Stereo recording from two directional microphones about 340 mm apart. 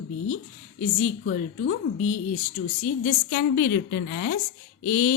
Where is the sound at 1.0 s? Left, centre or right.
Left.